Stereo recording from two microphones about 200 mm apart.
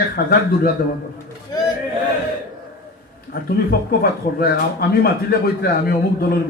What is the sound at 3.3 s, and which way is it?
Speech, 50° left (ahead or behind).